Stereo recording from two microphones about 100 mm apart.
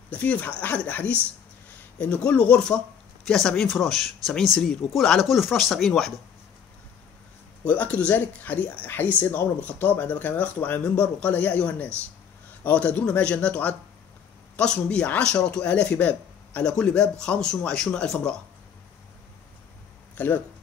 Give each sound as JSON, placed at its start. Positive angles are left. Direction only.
{"t": 0.1, "sound": "speech", "side_deg": 15}
{"t": 7.6, "sound": "speech", "side_deg": 15}
{"t": 20.2, "sound": "speech", "side_deg": 15}